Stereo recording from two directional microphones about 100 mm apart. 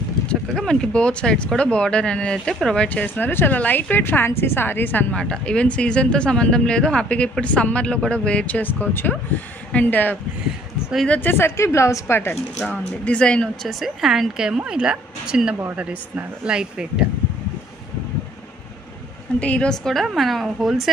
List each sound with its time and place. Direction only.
0.3 s speech: 5° left (ahead or behind)
5.1 s a woman's voice: 10° left (ahead or behind)
12.5 s speech: 10° left (ahead or behind); by 17.0 s 10° right (ahead or behind)
19.4 s speech: 10° left (ahead or behind)